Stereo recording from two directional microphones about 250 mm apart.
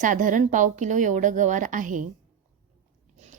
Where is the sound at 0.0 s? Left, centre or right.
Right.